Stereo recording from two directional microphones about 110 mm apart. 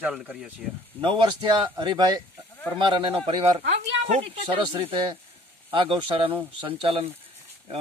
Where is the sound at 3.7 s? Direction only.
70° right (ahead or behind).